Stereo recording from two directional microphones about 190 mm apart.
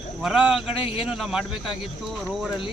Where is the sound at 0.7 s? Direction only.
30° left (ahead or behind).